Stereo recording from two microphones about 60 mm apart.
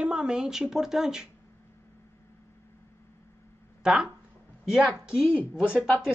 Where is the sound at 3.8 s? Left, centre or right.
Centre.